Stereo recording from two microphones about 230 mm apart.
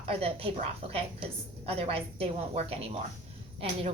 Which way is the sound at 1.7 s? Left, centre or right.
Right.